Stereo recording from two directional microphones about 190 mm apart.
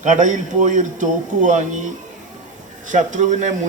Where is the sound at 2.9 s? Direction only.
40° right (ahead or behind).